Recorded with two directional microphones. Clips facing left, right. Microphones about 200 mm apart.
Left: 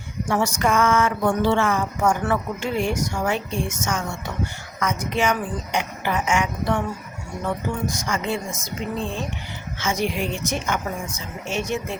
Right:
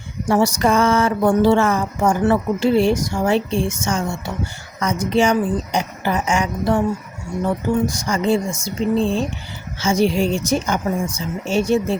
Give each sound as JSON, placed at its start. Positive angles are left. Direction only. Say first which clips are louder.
{"t": 0.3, "sound": "speech", "louder": "right 5 dB", "side_deg": -35}
{"t": 7.9, "sound": "speech", "louder": "right 7 dB", "side_deg": -35}